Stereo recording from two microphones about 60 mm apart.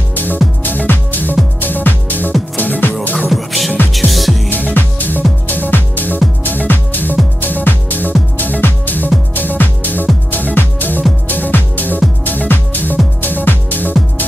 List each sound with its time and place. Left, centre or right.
0.1 s music: left
3.3 s music: centre
4.5 s music: left